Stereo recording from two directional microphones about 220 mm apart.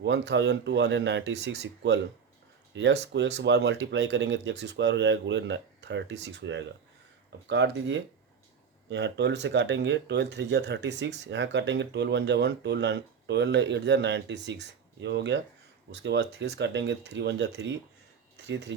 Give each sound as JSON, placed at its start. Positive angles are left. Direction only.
{"t": 0.0, "sound": "speech", "side_deg": -50}